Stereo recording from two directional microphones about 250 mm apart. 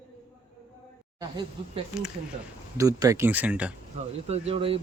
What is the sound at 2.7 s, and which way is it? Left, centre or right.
Speech, centre.